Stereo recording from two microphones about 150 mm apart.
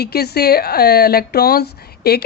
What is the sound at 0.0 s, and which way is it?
Speech, 90° left.